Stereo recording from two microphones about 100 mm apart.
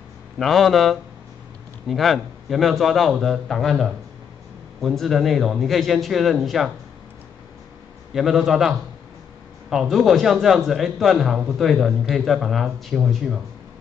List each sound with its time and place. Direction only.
0.4 s a man's voice: centre (ahead or behind)
8.1 s a man's voice: 5° right (ahead or behind)